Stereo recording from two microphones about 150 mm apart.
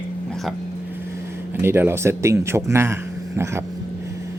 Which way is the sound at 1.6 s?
15° right (ahead or behind).